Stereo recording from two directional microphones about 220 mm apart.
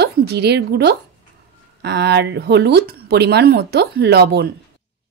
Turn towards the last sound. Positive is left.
turn(degrees=-45)  # may be behind; listen again after turning